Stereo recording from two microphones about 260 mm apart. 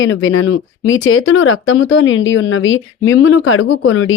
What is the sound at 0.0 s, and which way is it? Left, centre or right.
Speech, left.